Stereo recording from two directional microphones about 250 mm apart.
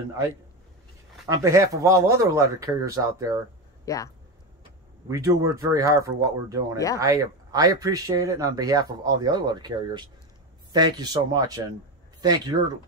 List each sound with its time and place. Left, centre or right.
1.3 s speech: centre
3.8 s speech: centre
5.0 s speech: centre